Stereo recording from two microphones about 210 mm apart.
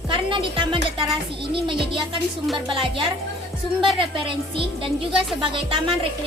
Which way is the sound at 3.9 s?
25° right (ahead or behind).